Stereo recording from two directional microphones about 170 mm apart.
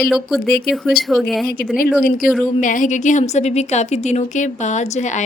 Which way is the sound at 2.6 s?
50° left (ahead or behind).